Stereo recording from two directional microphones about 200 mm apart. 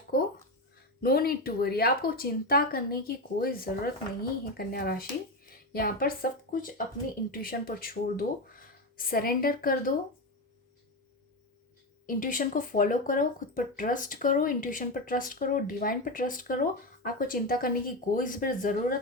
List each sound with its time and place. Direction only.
1.0 s speech: 50° left (ahead or behind)
12.0 s speech: 45° left (ahead or behind)